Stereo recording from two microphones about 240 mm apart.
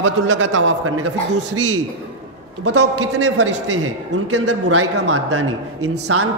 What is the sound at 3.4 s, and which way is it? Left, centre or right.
Speech, right.